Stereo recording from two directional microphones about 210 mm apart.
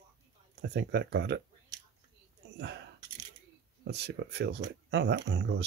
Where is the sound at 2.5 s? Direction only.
55° right (ahead or behind).